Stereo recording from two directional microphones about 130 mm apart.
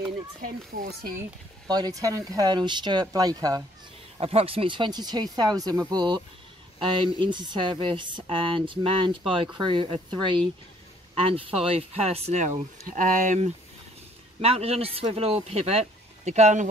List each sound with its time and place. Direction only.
0.4 s speech: 90° right
1.7 s speech: 30° right (ahead or behind)
4.2 s speech: 50° right (ahead or behind); by 13.5 s 75° right (ahead or behind)
14.4 s speech: 50° right (ahead or behind)